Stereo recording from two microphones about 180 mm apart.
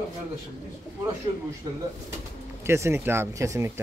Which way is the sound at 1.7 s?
20° right (ahead or behind).